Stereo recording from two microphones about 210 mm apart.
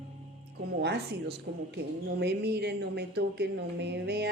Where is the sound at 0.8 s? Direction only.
55° right (ahead or behind).